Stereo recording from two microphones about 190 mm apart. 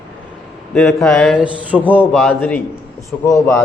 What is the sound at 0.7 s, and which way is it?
Speech, 5° left (ahead or behind).